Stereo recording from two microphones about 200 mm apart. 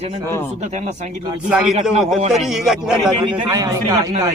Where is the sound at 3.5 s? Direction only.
15° right (ahead or behind).